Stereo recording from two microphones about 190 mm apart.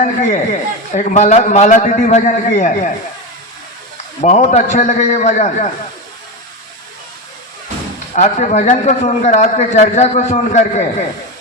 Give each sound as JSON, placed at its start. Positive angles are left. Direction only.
{"t": 0.0, "sound": "speech", "side_deg": 40}
{"t": 4.2, "sound": "speech", "side_deg": 40}
{"t": 8.1, "sound": "speech", "side_deg": 40}